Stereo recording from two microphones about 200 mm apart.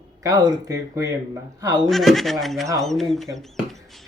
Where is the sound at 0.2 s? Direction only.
15° right (ahead or behind).